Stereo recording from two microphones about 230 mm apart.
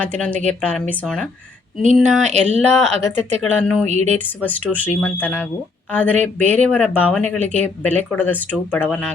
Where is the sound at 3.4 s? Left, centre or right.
Centre.